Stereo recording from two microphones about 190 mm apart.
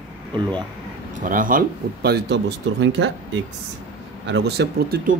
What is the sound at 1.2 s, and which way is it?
Speech, 45° right (ahead or behind).